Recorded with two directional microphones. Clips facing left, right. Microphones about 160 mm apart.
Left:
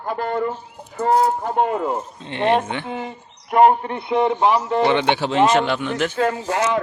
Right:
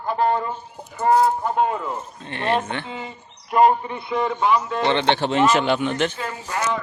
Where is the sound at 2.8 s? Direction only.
60° left (ahead or behind).